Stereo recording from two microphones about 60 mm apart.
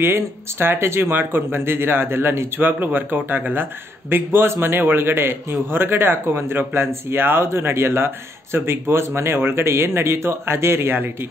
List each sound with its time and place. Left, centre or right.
0.0 s a man's voice: right